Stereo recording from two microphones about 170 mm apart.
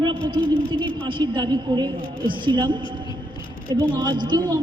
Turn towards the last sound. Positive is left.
turn(degrees=-25)  # may be behind; listen again after turning